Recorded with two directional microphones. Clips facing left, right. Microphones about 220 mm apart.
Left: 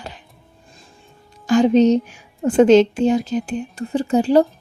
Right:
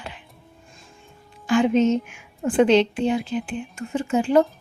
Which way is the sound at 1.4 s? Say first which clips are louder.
Left 5 dB; 40° left (ahead or behind).